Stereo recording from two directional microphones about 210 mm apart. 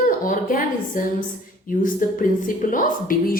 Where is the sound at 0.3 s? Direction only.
40° left (ahead or behind).